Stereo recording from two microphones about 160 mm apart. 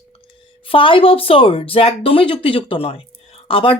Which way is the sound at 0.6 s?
35° left (ahead or behind).